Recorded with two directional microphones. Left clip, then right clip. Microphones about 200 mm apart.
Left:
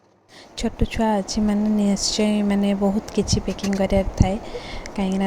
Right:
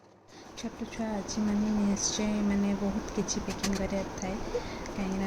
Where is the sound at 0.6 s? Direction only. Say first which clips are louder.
Left 14 dB; 45° left (ahead or behind).